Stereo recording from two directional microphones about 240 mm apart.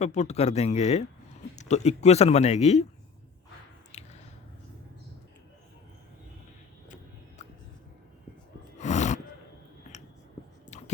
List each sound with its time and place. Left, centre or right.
0.0 s speech: left
3.9 s a sound: left
7.4 s music: left
8.8 s gasp: left